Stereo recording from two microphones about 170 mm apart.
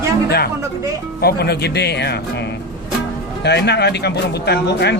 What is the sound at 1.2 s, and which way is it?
Speech, 70° left (ahead or behind).